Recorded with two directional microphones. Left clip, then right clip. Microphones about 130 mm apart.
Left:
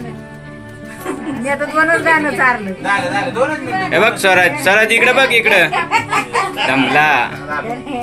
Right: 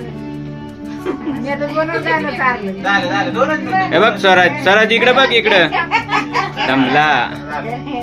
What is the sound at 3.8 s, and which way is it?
Speech, 20° right (ahead or behind).